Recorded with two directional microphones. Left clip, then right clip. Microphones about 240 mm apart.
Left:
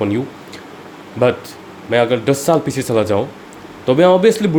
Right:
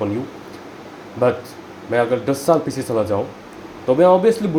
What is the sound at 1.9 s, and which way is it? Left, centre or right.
Speech, left.